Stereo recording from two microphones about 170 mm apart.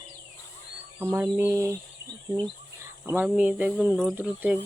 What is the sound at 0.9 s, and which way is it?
Speech, 15° right (ahead or behind).